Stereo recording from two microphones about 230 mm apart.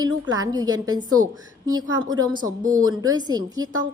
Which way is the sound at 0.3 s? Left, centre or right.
Centre.